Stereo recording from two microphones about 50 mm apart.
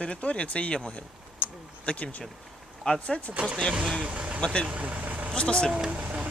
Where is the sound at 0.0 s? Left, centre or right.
Left.